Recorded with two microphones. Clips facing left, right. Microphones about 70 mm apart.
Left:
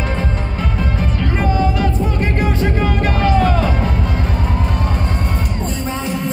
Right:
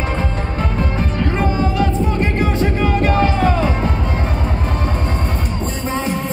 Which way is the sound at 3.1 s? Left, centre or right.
Right.